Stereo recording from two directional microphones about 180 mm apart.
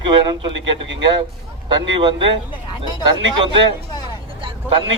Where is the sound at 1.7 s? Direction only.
25° right (ahead or behind).